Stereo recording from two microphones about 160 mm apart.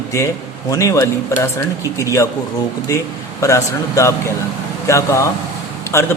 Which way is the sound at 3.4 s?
20° left (ahead or behind).